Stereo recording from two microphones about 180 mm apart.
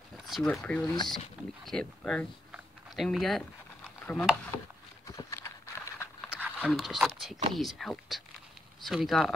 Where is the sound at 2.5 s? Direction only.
Centre (ahead or behind).